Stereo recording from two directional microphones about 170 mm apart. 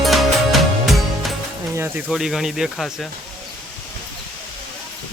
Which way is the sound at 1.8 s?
10° right (ahead or behind).